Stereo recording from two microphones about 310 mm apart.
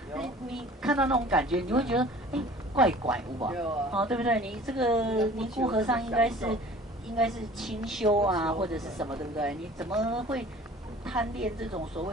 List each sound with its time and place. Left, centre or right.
0.1 s a woman's voice: centre
8.1 s speech: centre
8.6 s a woman's voice: centre
11.7 s speech: centre